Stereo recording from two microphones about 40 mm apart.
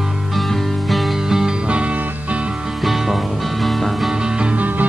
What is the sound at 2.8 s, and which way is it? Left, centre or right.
Music, centre.